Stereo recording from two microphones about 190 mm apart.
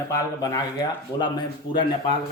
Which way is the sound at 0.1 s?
15° left (ahead or behind).